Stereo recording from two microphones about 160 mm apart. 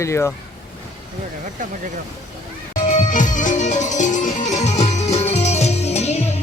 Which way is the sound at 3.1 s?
55° left (ahead or behind).